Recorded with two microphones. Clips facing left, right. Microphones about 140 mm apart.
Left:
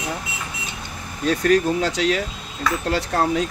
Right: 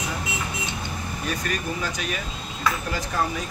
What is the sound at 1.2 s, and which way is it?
Speech, 80° left.